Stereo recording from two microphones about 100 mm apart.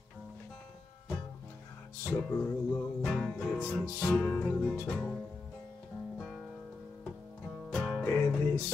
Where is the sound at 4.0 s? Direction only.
20° left (ahead or behind).